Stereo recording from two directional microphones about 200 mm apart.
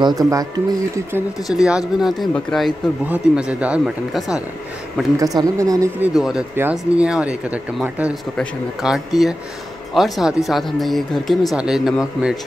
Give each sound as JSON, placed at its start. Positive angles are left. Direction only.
{"t": 0.0, "sound": "speech", "side_deg": -20}
{"t": 1.5, "sound": "speech", "side_deg": -5}
{"t": 5.2, "sound": "speech", "side_deg": -15}